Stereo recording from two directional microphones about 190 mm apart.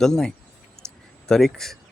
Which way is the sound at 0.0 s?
5° left (ahead or behind).